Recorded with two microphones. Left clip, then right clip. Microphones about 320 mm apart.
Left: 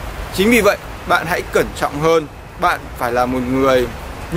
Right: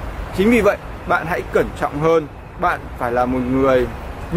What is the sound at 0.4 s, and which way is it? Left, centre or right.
Speech, centre.